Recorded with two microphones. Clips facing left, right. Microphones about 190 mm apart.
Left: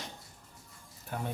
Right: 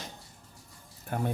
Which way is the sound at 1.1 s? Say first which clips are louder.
Right 6 dB; 55° right (ahead or behind).